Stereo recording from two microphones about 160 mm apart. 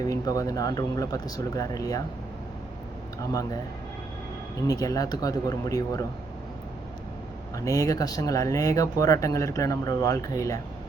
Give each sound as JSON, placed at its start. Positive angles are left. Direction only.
{"t": 0.1, "sound": "speech", "side_deg": 20}
{"t": 3.2, "sound": "speech", "side_deg": 20}
{"t": 4.6, "sound": "speech", "side_deg": 20}
{"t": 7.5, "sound": "speech", "side_deg": 20}